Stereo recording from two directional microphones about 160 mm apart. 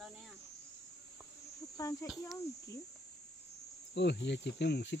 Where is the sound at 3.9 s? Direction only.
90° left.